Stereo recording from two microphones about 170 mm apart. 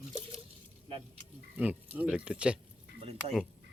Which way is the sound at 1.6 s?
10° right (ahead or behind).